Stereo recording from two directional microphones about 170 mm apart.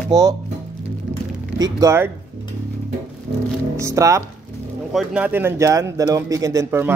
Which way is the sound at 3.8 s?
20° right (ahead or behind).